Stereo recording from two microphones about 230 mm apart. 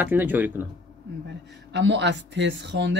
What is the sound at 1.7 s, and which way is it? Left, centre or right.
Speech, right.